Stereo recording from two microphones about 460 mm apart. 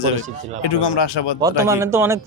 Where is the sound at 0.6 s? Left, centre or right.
Left.